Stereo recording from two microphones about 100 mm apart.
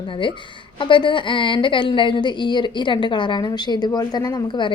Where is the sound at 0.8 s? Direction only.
55° left (ahead or behind).